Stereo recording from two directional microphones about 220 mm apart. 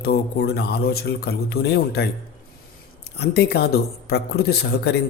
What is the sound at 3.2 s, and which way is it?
A man's voice, 50° left (ahead or behind).